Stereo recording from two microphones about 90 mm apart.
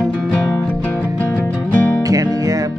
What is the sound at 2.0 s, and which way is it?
Music, 40° right (ahead or behind).